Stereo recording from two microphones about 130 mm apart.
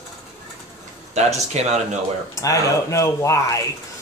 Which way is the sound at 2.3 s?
25° left (ahead or behind).